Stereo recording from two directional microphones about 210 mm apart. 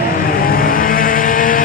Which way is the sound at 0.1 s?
45° left (ahead or behind).